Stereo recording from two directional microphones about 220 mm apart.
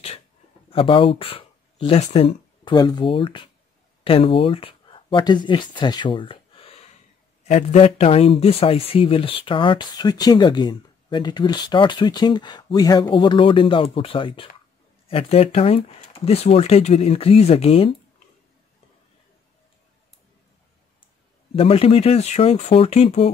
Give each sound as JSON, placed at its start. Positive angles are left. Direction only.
{"t": 0.7, "sound": "speech", "side_deg": 25}
{"t": 21.5, "sound": "speech", "side_deg": 25}